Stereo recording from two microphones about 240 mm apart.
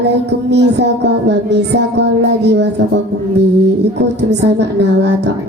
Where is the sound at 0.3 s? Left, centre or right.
Right.